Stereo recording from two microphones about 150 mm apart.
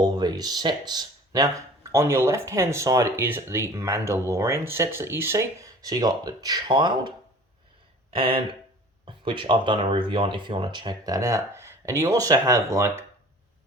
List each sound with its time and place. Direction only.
0.0 s speech: 25° right (ahead or behind)
8.1 s speech: 35° right (ahead or behind); by 13.1 s 20° right (ahead or behind)